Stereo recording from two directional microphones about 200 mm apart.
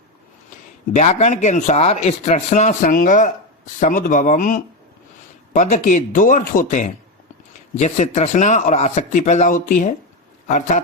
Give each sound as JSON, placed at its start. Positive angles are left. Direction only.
{"t": 0.9, "sound": "speech", "side_deg": 35}